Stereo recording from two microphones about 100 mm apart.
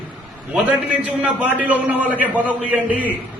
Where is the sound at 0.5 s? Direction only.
15° right (ahead or behind).